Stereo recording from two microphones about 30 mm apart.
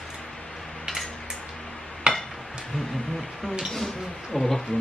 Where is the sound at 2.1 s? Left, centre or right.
Right.